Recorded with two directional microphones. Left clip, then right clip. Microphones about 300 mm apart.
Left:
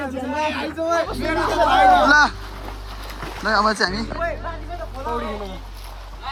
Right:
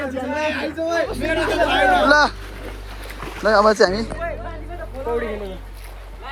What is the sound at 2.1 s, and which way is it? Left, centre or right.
Speech, centre.